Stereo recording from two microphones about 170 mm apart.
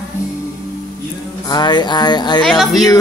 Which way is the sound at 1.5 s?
25° left (ahead or behind).